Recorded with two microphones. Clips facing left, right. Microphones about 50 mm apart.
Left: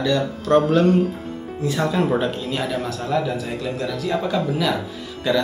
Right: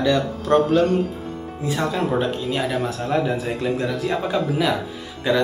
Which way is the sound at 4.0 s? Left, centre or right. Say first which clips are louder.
Even; centre.